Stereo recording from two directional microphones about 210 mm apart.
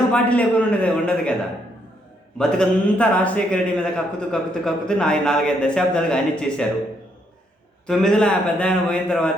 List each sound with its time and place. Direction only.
0.1 s a man's voice: 5° left (ahead or behind)
2.4 s a man's voice: 5° left (ahead or behind)
7.9 s a man's voice: 5° left (ahead or behind)